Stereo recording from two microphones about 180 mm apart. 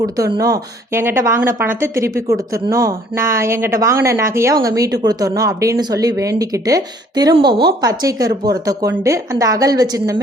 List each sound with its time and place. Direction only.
0.0 s a woman's voice: 20° right (ahead or behind)